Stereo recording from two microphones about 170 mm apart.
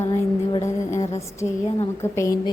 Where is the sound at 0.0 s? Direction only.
20° left (ahead or behind).